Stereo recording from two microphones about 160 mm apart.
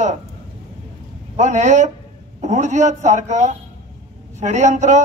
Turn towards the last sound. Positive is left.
turn(degrees=-50)  # may be behind; listen again after turning